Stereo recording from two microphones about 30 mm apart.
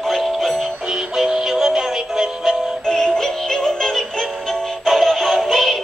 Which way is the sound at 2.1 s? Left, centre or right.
Centre.